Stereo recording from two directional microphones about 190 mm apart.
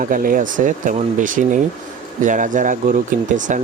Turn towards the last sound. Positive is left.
turn(degrees=-40)  # may be behind; listen again after turning